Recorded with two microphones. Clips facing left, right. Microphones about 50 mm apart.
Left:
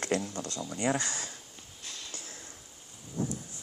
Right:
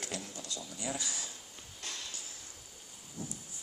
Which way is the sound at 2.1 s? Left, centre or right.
Left.